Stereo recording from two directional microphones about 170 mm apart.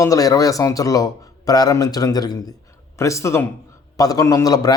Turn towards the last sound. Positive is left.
turn(degrees=20)  # may be behind; listen again after turning